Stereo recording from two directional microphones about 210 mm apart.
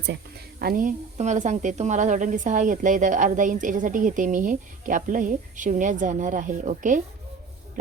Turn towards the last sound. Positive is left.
turn(degrees=-40)  # may be behind; listen again after turning